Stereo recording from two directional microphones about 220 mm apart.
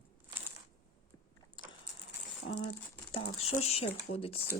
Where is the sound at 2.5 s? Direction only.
60° left (ahead or behind).